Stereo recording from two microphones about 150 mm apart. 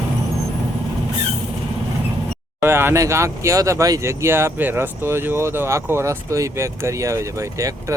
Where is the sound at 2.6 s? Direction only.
15° right (ahead or behind).